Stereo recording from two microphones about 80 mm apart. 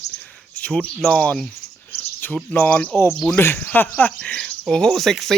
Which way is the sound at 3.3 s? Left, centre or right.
Left.